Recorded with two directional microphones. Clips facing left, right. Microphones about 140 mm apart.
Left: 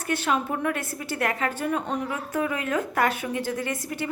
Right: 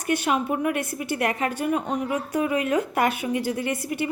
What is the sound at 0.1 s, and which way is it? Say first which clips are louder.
A woman's voice: right 2 dB; 15° right (ahead or behind).